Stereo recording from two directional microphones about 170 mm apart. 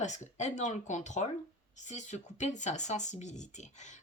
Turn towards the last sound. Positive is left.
turn(degrees=45)  # may be behind; listen again after turning